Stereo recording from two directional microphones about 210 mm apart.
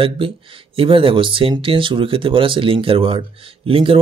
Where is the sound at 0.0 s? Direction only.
25° right (ahead or behind).